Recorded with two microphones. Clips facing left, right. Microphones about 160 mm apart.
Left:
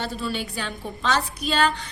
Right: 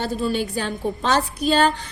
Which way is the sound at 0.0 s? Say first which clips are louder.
Right 6 dB; 45° right (ahead or behind).